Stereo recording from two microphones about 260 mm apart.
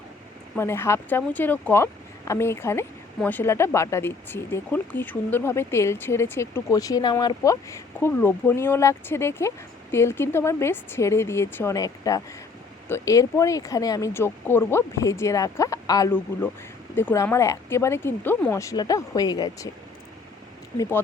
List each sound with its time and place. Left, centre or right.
0.5 s speech: centre